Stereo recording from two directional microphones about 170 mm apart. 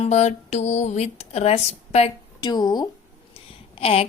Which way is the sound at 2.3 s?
25° left (ahead or behind).